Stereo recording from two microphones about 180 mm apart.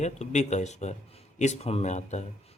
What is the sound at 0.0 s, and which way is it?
Speech, 40° left (ahead or behind).